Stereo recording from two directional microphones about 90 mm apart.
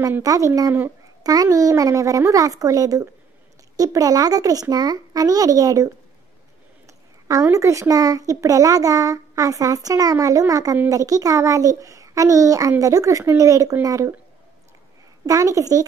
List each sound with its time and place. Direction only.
0.2 s child singing: 40° right (ahead or behind)
3.7 s a child's voice: 40° right (ahead or behind)
7.5 s child singing: 35° right (ahead or behind)
15.2 s child singing: 40° right (ahead or behind)